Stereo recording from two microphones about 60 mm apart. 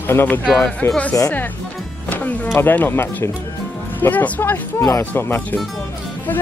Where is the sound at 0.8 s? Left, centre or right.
Left.